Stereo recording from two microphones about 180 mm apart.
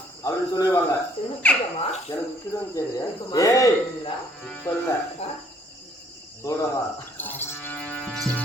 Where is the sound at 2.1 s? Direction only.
20° left (ahead or behind).